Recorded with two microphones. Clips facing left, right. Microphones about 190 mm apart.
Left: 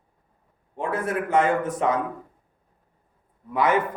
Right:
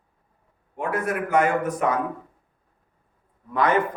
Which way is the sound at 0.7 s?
25° left (ahead or behind).